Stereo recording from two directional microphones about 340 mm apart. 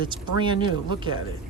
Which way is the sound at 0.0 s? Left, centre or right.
Centre.